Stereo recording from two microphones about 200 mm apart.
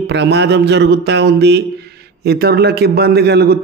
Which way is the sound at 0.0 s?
60° right (ahead or behind).